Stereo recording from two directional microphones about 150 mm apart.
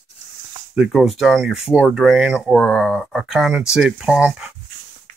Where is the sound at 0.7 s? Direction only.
5° right (ahead or behind).